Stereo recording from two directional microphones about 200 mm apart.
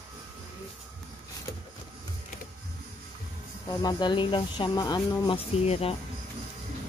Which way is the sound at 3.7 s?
20° left (ahead or behind).